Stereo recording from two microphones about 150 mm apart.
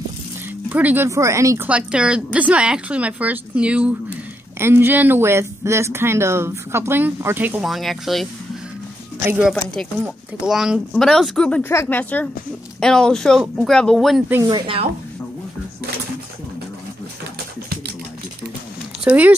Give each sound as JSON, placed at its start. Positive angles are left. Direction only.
{"t": 0.7, "sound": "speech", "side_deg": -10}
{"t": 1.7, "sound": "speech", "side_deg": -5}
{"t": 7.6, "sound": "speech", "side_deg": 0}
{"t": 9.2, "sound": "speech", "side_deg": -15}
{"t": 14.5, "sound": "a woman's voice", "side_deg": -35}
{"t": 19.0, "sound": "speech", "side_deg": -10}